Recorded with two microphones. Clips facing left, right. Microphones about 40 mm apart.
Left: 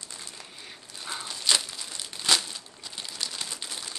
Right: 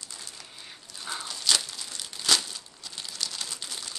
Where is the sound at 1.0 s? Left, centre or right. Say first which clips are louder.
Even; centre.